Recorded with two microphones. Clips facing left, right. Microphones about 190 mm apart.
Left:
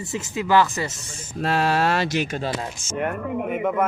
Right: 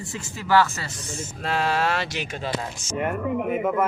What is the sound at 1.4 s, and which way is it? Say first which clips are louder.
Speech: left 3 dB; 40° left (ahead or behind).